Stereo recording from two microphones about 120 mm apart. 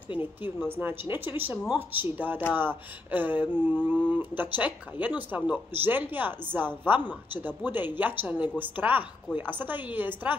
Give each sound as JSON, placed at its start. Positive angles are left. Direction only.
{"t": 0.7, "sound": "speech", "side_deg": -15}